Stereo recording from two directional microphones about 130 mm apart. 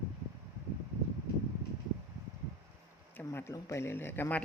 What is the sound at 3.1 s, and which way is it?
Speech, 15° left (ahead or behind).